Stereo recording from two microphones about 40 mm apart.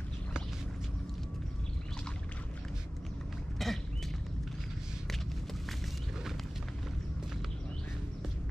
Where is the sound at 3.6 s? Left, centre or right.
Centre.